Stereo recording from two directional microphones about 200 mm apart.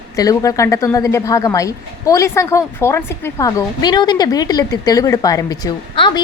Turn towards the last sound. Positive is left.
turn(degrees=20)  # may be behind; listen again after turning